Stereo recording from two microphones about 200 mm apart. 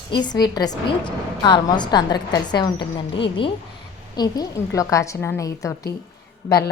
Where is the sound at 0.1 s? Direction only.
20° left (ahead or behind).